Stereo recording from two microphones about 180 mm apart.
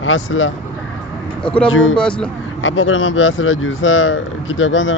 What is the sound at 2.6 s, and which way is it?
Speech, 90° left.